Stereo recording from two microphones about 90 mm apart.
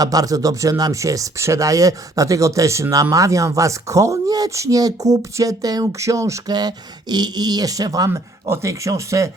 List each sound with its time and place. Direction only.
0.0 s speech: 45° right (ahead or behind)
6.5 s speech: 50° right (ahead or behind)
8.1 s speech: 35° right (ahead or behind)